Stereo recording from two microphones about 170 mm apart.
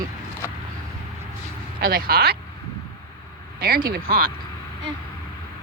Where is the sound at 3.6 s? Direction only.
65° right (ahead or behind).